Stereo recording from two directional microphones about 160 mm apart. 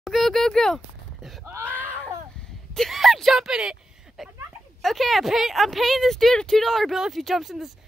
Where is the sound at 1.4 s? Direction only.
15° right (ahead or behind).